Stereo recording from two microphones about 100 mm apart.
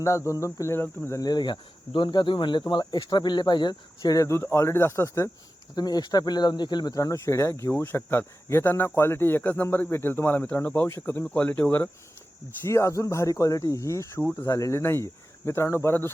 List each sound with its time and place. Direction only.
0.0 s speech: 30° left (ahead or behind)
1.2 s speech: 45° left (ahead or behind); by 5.3 s 30° left (ahead or behind)
5.7 s speech: 40° left (ahead or behind)
6.9 s speech: 35° left (ahead or behind); by 10.8 s 15° left (ahead or behind)
10.8 s speech: 25° left (ahead or behind)
12.6 s speech: 30° left (ahead or behind)